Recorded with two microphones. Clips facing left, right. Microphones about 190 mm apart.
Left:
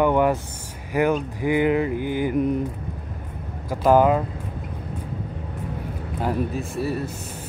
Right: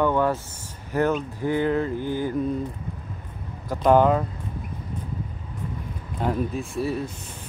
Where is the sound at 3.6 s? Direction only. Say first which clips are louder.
Left 1 dB; 5° left (ahead or behind).